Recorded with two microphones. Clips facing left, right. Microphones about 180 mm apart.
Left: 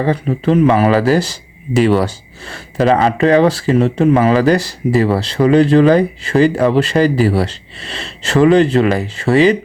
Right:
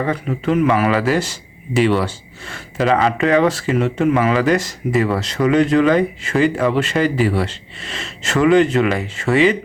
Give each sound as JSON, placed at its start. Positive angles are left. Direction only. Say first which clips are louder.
{"t": 0.0, "sound": "speech", "louder": "left 5 dB", "side_deg": 30}